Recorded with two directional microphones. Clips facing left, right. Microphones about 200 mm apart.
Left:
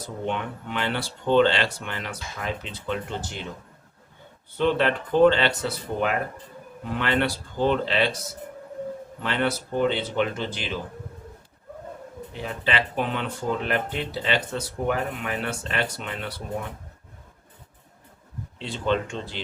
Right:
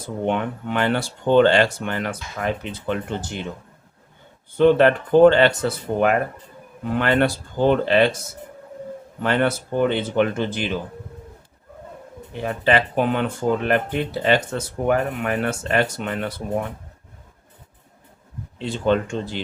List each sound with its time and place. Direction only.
0.3 s speech: 55° right (ahead or behind)
4.5 s speech: 50° right (ahead or behind)
9.2 s speech: 50° right (ahead or behind)
12.4 s speech: 50° right (ahead or behind)
18.6 s speech: 45° right (ahead or behind)